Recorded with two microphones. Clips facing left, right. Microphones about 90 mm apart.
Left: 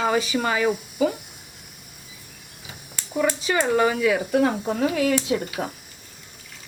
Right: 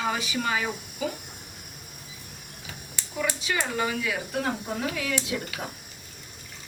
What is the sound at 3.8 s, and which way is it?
Speech, 60° left (ahead or behind).